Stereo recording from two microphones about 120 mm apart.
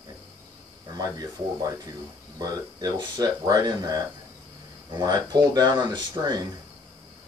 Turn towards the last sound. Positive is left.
turn(degrees=-35)  # may be behind; listen again after turning